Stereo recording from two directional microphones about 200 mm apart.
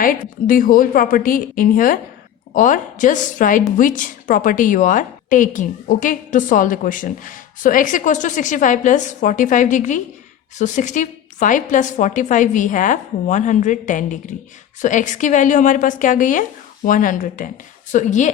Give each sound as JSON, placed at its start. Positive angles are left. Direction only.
{"t": 0.0, "sound": "a woman's voice", "side_deg": 45}